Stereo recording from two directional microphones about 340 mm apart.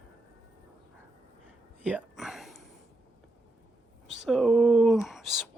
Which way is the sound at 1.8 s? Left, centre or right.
Centre.